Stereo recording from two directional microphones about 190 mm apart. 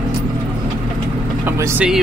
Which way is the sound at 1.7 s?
5° right (ahead or behind).